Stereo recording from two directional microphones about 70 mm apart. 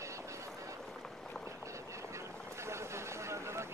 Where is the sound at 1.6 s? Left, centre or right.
Right.